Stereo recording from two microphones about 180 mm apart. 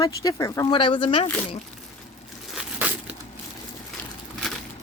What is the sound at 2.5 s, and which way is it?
Crumpling, 5° right (ahead or behind).